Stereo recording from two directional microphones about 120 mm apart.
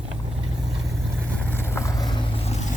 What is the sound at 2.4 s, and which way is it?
Vehicle, 60° left (ahead or behind).